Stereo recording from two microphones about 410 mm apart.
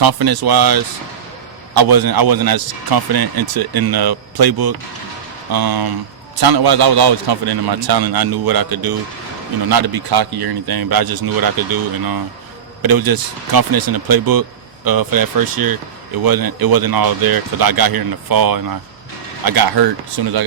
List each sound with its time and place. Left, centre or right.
0.0 s a man's voice: right